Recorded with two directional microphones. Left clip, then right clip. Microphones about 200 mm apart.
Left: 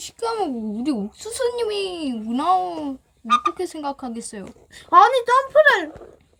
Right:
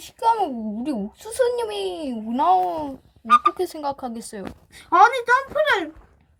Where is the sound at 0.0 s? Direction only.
10° right (ahead or behind).